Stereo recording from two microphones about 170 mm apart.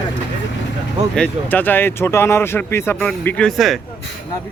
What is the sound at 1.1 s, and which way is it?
Speech, 10° left (ahead or behind).